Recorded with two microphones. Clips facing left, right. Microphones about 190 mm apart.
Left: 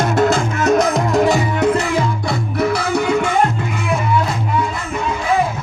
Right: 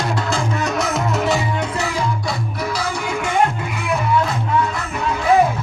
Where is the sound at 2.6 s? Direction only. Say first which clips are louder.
Left 11 dB; 60° left (ahead or behind).